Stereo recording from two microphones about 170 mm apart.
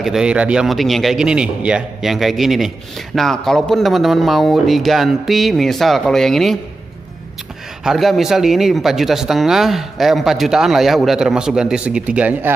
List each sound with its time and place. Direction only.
0.0 s speech: 5° right (ahead or behind)
7.8 s speech: centre (ahead or behind)